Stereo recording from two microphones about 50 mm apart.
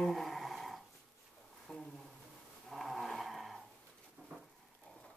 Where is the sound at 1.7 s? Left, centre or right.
Centre.